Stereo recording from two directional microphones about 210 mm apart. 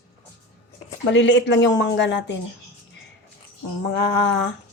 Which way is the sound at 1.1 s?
60° left (ahead or behind).